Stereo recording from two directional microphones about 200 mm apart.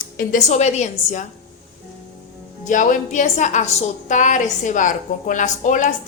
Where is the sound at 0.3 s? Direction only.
35° left (ahead or behind).